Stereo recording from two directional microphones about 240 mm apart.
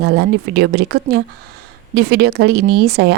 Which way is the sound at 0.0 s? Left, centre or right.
Right.